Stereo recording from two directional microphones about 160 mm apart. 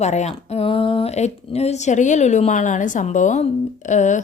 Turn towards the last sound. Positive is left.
turn(degrees=50)  # may be behind; listen again after turning